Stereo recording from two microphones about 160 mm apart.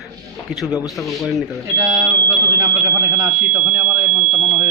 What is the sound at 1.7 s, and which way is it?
Speech, 20° right (ahead or behind).